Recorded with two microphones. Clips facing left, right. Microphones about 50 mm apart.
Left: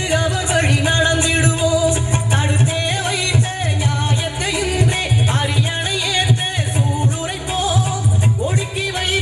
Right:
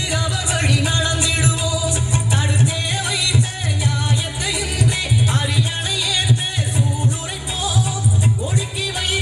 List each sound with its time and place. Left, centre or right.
0.1 s music: left
4.5 s music: left